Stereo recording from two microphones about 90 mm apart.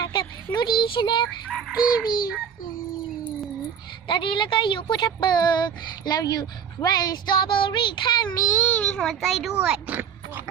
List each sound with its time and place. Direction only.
0.1 s a sound: 60° left (ahead or behind)
1.5 s a sound: 5° right (ahead or behind)
4.1 s a woman's voice: 65° left (ahead or behind)
5.0 s speech: 50° left (ahead or behind)
8.5 s a child's voice: 20° left (ahead or behind); by 9.5 s centre (ahead or behind)
9.6 s speech: 15° right (ahead or behind)